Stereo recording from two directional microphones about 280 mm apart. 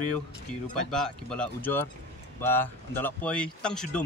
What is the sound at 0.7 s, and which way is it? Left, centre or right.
Speech, centre.